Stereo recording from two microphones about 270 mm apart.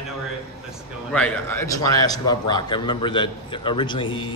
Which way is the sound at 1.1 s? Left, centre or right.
Centre.